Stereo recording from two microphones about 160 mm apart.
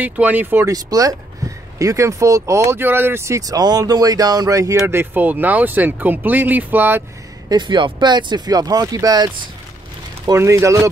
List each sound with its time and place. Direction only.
0.0 s speech: 10° right (ahead or behind)
1.4 s a sound: 20° right (ahead or behind)
1.8 s speech: 20° right (ahead or behind)
7.4 s speech: 30° right (ahead or behind)